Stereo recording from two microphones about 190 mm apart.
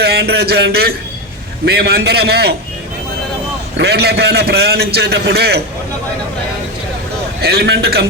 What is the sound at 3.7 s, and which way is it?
A man's voice, 55° right (ahead or behind).